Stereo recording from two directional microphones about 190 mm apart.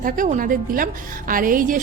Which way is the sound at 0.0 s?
45° right (ahead or behind).